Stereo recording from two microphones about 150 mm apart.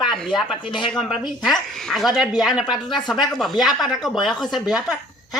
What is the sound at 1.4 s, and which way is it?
Speech, centre (ahead or behind).